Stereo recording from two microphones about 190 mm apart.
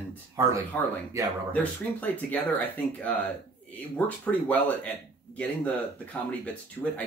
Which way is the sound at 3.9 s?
5° left (ahead or behind).